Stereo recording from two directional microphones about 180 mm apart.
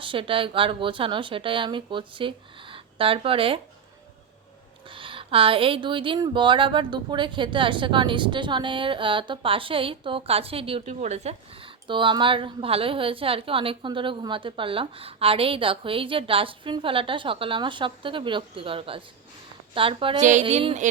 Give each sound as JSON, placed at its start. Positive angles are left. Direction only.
{"t": 0.0, "sound": "speech", "side_deg": -30}
{"t": 4.9, "sound": "speech", "side_deg": -30}
{"t": 20.4, "sound": "a sound", "side_deg": -30}